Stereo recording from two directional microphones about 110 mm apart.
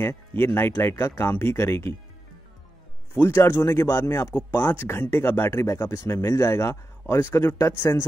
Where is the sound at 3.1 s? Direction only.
20° left (ahead or behind).